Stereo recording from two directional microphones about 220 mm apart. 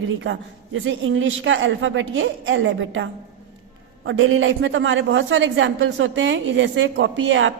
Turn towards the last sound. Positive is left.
turn(degrees=-60)  # may be behind; listen again after turning